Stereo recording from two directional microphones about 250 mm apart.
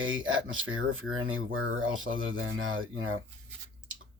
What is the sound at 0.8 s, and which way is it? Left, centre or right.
Speech, right.